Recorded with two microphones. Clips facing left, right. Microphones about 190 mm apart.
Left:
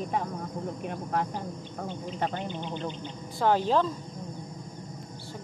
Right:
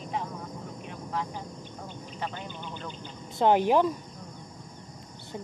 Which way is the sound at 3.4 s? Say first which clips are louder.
Right 2 dB; 15° right (ahead or behind).